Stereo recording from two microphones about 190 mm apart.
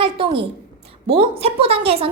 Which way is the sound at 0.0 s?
30° right (ahead or behind).